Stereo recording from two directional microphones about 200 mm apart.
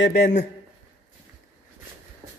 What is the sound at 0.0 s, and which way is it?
Speech, 55° left (ahead or behind).